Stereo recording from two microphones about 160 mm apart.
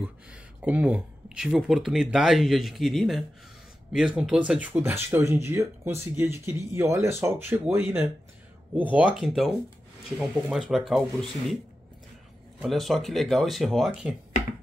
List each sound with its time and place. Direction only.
0.0 s speech: 5° right (ahead or behind)
12.6 s speech: centre (ahead or behind)